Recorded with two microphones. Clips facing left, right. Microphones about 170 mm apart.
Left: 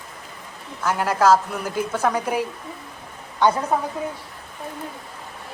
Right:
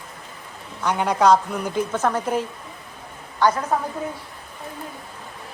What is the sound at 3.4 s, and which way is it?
Speech, 20° left (ahead or behind).